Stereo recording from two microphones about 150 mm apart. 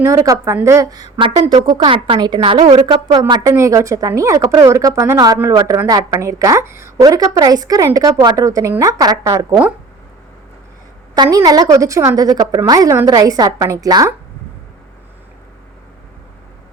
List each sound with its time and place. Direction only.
0.0 s a woman's voice: 20° right (ahead or behind)
11.1 s a woman's voice: 25° right (ahead or behind)